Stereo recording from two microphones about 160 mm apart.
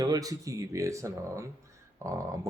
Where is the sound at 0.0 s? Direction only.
25° right (ahead or behind).